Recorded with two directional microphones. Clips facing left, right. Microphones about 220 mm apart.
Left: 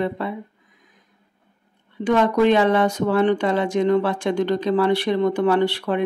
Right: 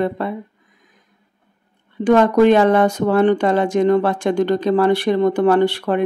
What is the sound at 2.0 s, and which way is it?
Speech, 50° right (ahead or behind).